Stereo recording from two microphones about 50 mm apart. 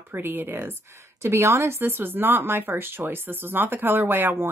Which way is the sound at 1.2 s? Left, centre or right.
Right.